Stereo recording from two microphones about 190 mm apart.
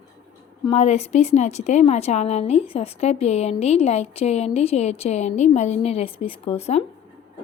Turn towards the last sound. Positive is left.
turn(degrees=35)  # may be behind; listen again after turning